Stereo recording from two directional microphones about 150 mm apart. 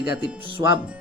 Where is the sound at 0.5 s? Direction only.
30° right (ahead or behind).